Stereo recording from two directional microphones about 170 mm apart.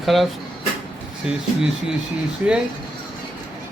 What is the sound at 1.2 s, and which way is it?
Speech, 5° right (ahead or behind).